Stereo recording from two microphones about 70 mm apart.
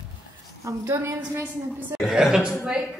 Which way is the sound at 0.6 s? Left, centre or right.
Right.